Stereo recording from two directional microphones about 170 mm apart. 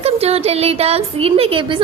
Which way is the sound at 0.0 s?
35° right (ahead or behind).